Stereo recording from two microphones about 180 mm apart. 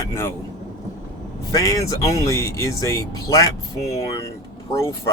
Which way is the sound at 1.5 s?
20° left (ahead or behind).